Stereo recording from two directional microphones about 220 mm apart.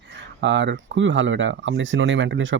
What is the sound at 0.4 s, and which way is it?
Speech, 55° right (ahead or behind).